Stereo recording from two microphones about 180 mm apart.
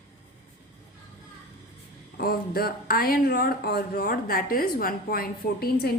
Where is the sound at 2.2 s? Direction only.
55° left (ahead or behind).